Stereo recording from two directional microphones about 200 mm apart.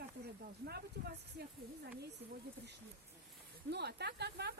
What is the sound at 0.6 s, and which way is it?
Speech, 55° right (ahead or behind).